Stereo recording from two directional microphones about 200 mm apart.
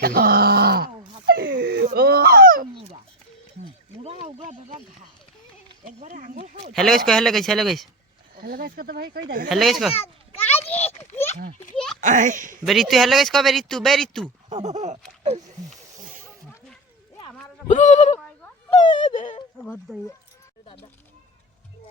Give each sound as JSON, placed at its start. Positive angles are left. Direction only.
{"t": 0.0, "sound": "groan", "side_deg": -50}
{"t": 1.3, "sound": "a sound", "side_deg": -55}
{"t": 4.0, "sound": "speech", "side_deg": -30}
{"t": 6.7, "sound": "speech", "side_deg": 0}
{"t": 8.4, "sound": "speech", "side_deg": -45}
{"t": 9.5, "sound": "speech", "side_deg": 0}
{"t": 10.5, "sound": "a sound", "side_deg": 30}
{"t": 11.9, "sound": "speech", "side_deg": -40}
{"t": 12.6, "sound": "speech", "side_deg": 0}
{"t": 14.5, "sound": "speech", "side_deg": -35}
{"t": 17.7, "sound": "speech", "side_deg": 35}
{"t": 19.5, "sound": "speech", "side_deg": 5}